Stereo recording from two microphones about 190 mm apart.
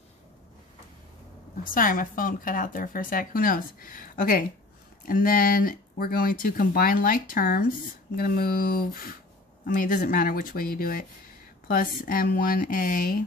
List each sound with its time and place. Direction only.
1.6 s speech: 45° left (ahead or behind)